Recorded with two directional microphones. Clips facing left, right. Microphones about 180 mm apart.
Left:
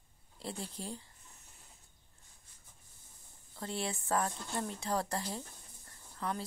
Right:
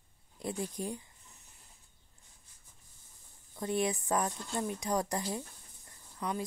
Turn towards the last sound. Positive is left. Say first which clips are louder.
# right 2 dB
turn(degrees=-15)  # may be behind; listen again after turning